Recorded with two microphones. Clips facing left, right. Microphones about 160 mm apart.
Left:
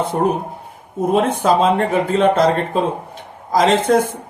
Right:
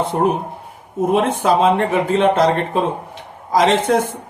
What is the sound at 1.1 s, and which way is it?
Speech, 40° left (ahead or behind).